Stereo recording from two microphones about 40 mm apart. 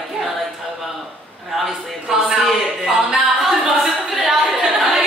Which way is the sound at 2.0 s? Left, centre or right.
Centre.